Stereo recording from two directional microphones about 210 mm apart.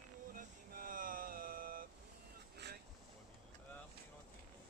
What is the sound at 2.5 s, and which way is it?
Boat, 50° right (ahead or behind).